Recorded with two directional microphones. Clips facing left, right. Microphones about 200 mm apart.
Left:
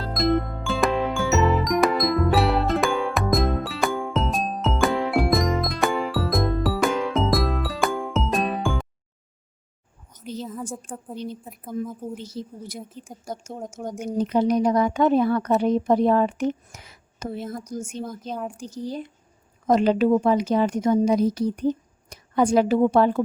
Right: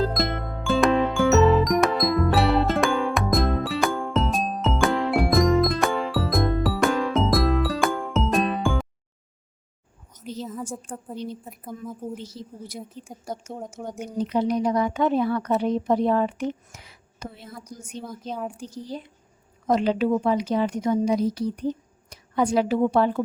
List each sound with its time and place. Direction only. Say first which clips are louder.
0.0 s music: left 3 dB; centre (ahead or behind)
10.2 s a sound: left 1 dB; centre (ahead or behind)
11.4 s a woman's voice: left 5 dB; centre (ahead or behind)
12.2 s speech: left 3 dB; 50° left (ahead or behind)
12.8 s a woman's voice: even; centre (ahead or behind)
13.8 s speech: left 4 dB; 45° left (ahead or behind)
18.3 s a woman's voice: right 2 dB; centre (ahead or behind)
18.5 s a woman's voice: left 3 dB; 45° left (ahead or behind)